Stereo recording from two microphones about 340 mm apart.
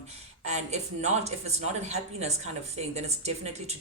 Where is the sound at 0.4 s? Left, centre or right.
Centre.